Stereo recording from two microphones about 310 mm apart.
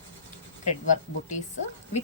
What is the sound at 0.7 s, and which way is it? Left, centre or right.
Speech, left.